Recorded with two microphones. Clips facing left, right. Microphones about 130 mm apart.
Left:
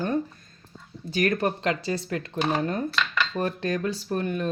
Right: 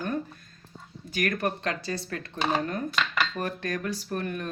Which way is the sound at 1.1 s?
25° left (ahead or behind).